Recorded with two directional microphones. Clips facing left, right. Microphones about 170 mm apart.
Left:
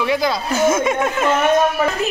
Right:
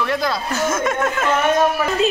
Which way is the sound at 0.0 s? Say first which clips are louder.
Left 2 dB; centre (ahead or behind).